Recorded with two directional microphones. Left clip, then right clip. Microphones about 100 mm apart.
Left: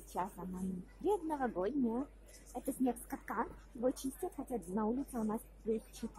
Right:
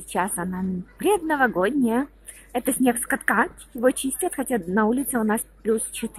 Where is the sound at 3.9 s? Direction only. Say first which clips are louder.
Right 15 dB; 30° right (ahead or behind).